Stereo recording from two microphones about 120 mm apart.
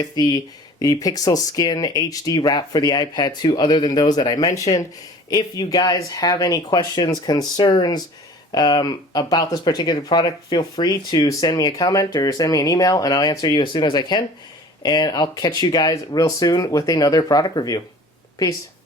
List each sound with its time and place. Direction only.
0.0 s speech: 30° left (ahead or behind)